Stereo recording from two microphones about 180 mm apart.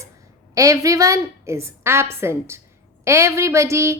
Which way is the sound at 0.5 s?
20° right (ahead or behind).